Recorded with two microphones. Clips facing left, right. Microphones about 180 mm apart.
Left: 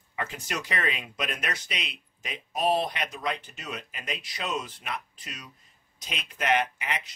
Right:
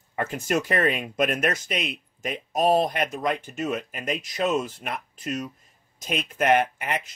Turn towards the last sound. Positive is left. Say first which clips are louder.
# right 5 dB
turn(degrees=-50)  # may be behind; listen again after turning